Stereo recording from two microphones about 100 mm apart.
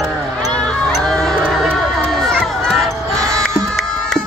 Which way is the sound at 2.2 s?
5° left (ahead or behind).